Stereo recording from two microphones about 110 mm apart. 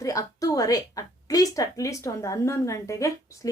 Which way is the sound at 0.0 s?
30° left (ahead or behind).